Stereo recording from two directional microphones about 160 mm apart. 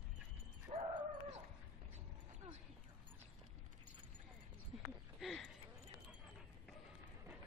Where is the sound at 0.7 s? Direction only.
40° right (ahead or behind).